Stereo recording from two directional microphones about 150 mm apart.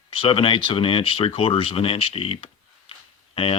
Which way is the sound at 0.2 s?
40° left (ahead or behind).